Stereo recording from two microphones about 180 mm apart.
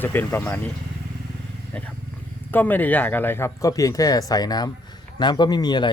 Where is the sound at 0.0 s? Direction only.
10° left (ahead or behind).